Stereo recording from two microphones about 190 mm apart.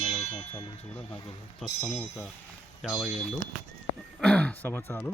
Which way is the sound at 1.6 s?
5° left (ahead or behind).